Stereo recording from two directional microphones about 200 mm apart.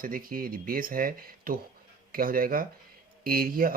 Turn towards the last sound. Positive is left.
turn(degrees=-45)  # may be behind; listen again after turning